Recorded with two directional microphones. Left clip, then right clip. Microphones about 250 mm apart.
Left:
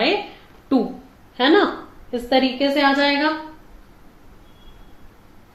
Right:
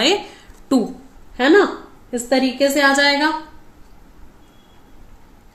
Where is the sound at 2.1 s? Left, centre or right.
Right.